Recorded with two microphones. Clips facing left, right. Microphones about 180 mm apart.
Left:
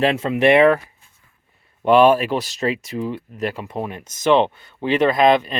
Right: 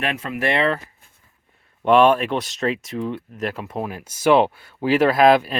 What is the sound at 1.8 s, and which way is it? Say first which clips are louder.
Speech: left 2 dB; 5° left (ahead or behind).